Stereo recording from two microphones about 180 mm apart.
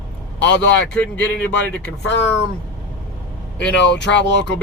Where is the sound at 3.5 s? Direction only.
80° left.